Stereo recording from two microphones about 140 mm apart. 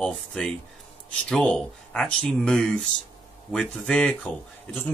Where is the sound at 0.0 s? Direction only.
5° left (ahead or behind).